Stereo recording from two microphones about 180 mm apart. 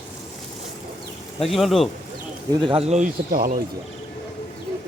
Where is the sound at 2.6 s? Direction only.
30° right (ahead or behind); by 3.6 s 50° right (ahead or behind).